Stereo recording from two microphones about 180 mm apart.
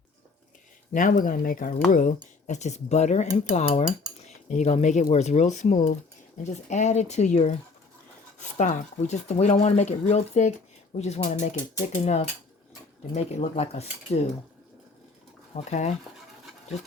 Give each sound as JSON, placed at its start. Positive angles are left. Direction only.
{"t": 0.9, "sound": "speech", "side_deg": 45}
{"t": 15.5, "sound": "speech", "side_deg": 40}